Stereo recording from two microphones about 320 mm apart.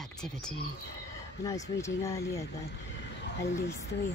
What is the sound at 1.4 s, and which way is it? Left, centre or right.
Speech, centre.